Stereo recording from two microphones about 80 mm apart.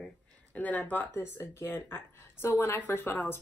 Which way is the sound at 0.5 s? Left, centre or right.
Left.